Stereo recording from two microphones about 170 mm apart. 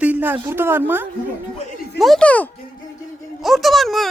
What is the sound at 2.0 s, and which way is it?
Speech, 5° left (ahead or behind).